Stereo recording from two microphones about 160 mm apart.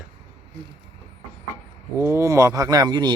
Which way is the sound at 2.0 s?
15° right (ahead or behind).